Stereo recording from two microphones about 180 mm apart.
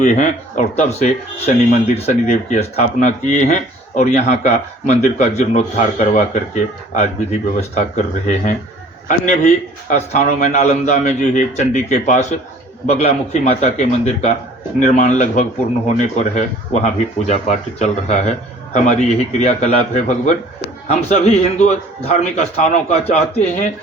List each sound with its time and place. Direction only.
0.0 s speech: 45° left (ahead or behind)